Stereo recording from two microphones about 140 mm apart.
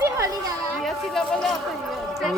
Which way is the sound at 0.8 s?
Centre (ahead or behind).